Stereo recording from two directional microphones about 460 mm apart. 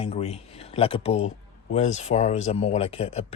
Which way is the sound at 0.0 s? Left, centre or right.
Centre.